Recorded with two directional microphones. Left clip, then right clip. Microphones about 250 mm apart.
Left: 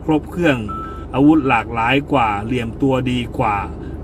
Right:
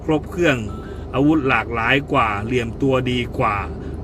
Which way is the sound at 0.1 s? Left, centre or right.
Centre.